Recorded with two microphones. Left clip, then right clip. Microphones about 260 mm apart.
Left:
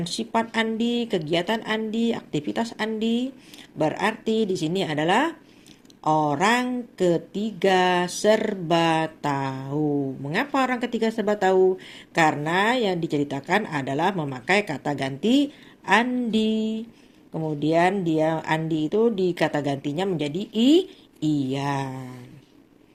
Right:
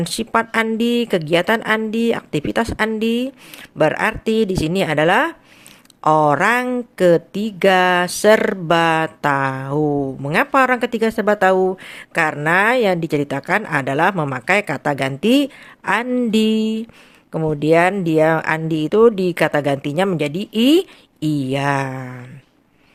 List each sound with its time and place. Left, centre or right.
0.0 s speech: right
9.8 s speech: right
10.2 s speech: right
21.5 s a sound: right